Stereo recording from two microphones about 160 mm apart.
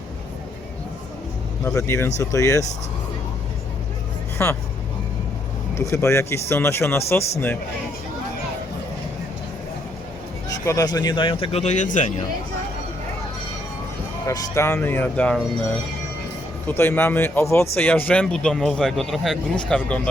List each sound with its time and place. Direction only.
1.6 s speech: 15° left (ahead or behind)
4.4 s speech: 10° left (ahead or behind)
5.7 s speech: 15° left (ahead or behind)
10.7 s speech: 25° left (ahead or behind); by 12.2 s 50° left (ahead or behind)
14.3 s speech: 20° left (ahead or behind)
16.6 s a man's voice: 15° left (ahead or behind)